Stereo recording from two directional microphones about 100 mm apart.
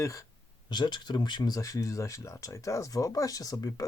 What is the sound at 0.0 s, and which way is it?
Speech, 35° left (ahead or behind).